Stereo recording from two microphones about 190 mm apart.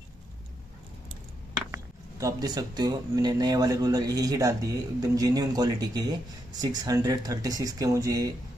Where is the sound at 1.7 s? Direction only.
15° right (ahead or behind).